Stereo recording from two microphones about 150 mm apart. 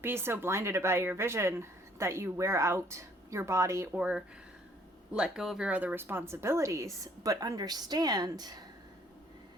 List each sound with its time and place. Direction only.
0.0 s speech: 15° right (ahead or behind)
5.1 s speech: 5° right (ahead or behind); by 8.6 s 25° right (ahead or behind)